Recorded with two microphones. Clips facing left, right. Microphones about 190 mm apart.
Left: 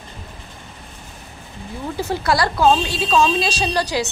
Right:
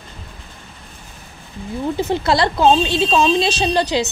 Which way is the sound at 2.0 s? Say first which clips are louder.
Right 2 dB; 20° right (ahead or behind).